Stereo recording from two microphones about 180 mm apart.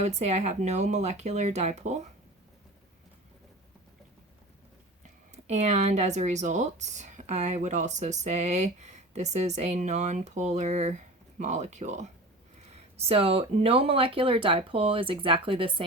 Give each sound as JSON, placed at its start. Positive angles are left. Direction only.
{"t": 0.0, "sound": "speech", "side_deg": -40}
{"t": 5.0, "sound": "speech", "side_deg": -40}